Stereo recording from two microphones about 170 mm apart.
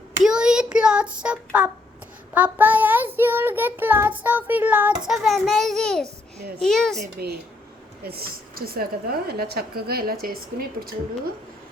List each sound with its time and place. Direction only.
0.2 s hands: 5° right (ahead or behind)
2.3 s child singing: 10° right (ahead or behind)
6.6 s speech: 5° left (ahead or behind)
7.2 s a woman's voice: 70° right (ahead or behind)